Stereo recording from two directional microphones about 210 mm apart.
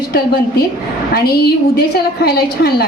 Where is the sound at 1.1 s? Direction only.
50° left (ahead or behind).